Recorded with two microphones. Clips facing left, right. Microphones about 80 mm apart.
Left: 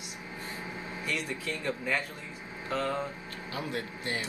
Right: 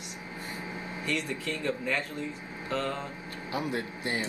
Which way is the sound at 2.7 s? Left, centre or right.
Centre.